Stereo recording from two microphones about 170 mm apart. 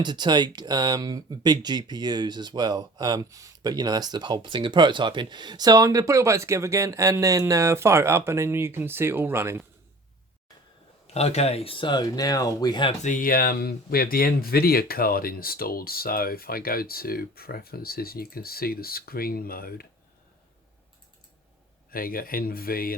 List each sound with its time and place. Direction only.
0.0 s speech: 25° right (ahead or behind)
11.0 s speech: 40° left (ahead or behind)
13.0 s speech: 50° left (ahead or behind)
21.8 s speech: 60° left (ahead or behind)